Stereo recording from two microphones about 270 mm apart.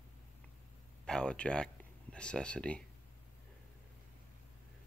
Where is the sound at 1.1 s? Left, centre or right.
Centre.